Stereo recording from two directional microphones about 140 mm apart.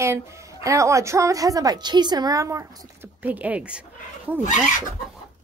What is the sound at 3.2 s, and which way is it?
A woman's voice, 10° right (ahead or behind).